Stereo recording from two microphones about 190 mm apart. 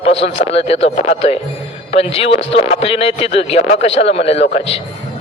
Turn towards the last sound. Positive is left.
turn(degrees=30)  # may be behind; listen again after turning